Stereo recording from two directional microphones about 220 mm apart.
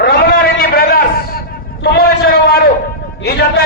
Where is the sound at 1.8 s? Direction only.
45° left (ahead or behind).